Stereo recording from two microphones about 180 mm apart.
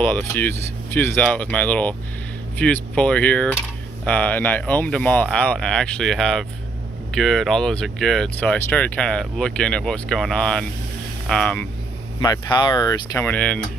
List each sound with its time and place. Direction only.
0.0 s speech: 10° left (ahead or behind)
12.2 s speech: 20° left (ahead or behind)
13.3 s speech: 5° left (ahead or behind)